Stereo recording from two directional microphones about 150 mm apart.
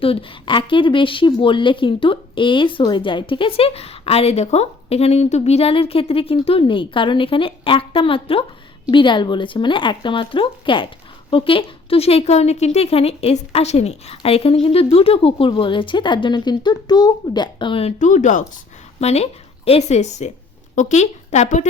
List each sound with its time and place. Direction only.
0.0 s a woman's voice: 40° left (ahead or behind)
18.0 s speech: 55° left (ahead or behind)
18.9 s a woman's voice: 45° left (ahead or behind)